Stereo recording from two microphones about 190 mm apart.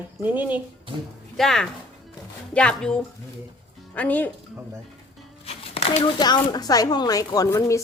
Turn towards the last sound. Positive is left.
turn(degrees=15)  # may be behind; listen again after turning